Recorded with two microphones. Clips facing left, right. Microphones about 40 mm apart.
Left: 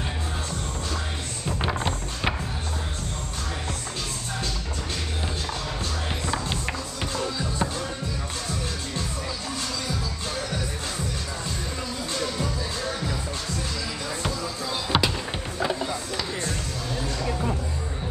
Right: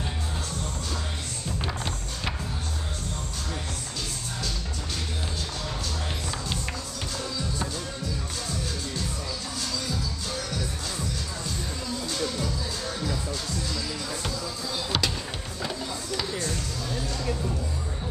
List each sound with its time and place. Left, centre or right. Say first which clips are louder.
1.6 s music: left 7 dB; left
7.2 s music: left 5 dB; left
14.9 s music: left 5 dB; centre